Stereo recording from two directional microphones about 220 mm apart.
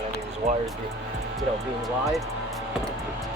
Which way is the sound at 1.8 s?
Centre (ahead or behind).